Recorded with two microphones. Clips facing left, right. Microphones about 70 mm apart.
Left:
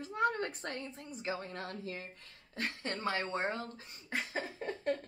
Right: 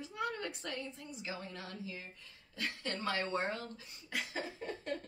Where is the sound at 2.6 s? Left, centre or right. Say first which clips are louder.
Left 2 dB; left.